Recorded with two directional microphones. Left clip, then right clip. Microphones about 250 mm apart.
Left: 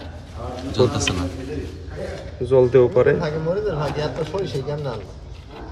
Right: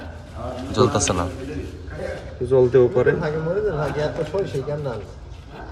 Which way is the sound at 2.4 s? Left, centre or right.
Centre.